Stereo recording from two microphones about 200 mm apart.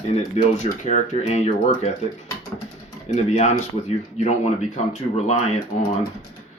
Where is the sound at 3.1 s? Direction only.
35° left (ahead or behind).